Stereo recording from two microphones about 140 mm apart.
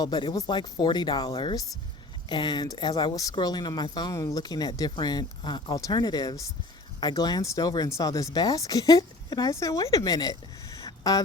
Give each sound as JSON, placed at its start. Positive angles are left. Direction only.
{"t": 0.0, "sound": "speech", "side_deg": 30}